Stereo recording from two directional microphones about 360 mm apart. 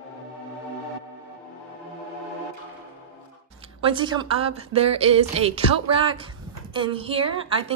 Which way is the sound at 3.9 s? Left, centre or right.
Centre.